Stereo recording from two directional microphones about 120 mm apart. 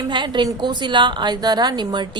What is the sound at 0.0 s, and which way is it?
A woman's voice, 40° right (ahead or behind).